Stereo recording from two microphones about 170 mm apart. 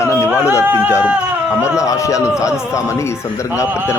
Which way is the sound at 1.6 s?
20° left (ahead or behind).